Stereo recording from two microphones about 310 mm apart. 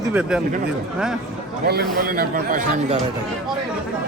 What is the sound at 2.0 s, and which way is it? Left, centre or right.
Speech, right.